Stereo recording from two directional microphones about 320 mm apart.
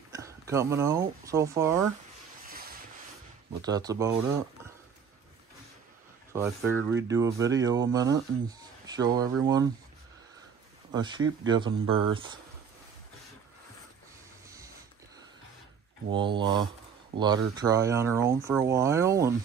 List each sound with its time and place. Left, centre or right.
0.1 s speech: centre
2.4 s train: right
3.6 s speech: centre
6.3 s speech: centre
10.9 s speech: centre
16.1 s speech: centre